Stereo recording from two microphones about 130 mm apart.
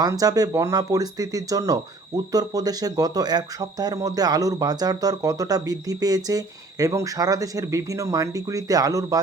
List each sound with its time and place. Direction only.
0.0 s speech: 30° right (ahead or behind)